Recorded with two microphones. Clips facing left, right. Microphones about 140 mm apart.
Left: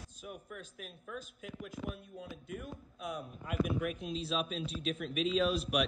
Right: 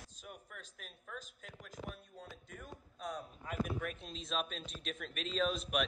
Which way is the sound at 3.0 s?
10° left (ahead or behind).